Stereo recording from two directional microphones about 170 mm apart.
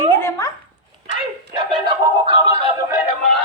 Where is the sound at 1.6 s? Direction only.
25° right (ahead or behind).